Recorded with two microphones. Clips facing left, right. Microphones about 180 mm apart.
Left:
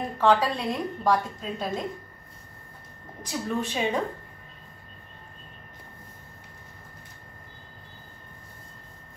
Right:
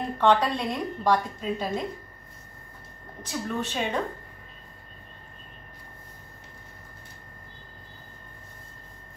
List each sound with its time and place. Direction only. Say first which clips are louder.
0.2 s a woman's voice: even; centre (ahead or behind)
3.2 s a woman's voice: left 1 dB; 10° left (ahead or behind)